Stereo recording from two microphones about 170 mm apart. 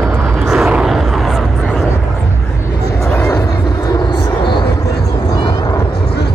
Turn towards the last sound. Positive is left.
turn(degrees=25)  # may be behind; listen again after turning